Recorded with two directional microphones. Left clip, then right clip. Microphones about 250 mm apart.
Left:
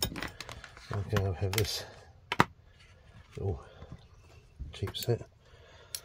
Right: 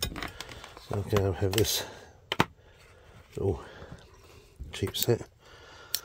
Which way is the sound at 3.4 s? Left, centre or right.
Right.